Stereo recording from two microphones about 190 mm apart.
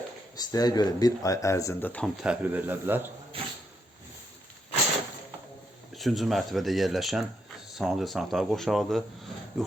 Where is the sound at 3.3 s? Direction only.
30° right (ahead or behind).